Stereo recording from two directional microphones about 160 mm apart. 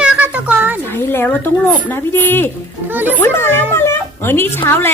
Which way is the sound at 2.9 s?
10° right (ahead or behind).